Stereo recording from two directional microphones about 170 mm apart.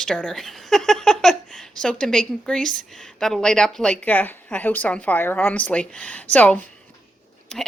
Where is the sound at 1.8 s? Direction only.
5° left (ahead or behind).